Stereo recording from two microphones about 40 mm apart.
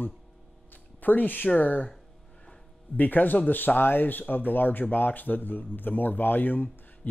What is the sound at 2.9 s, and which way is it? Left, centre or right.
Speech, left.